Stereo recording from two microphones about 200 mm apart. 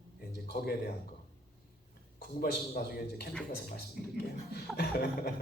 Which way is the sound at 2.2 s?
50° left (ahead or behind).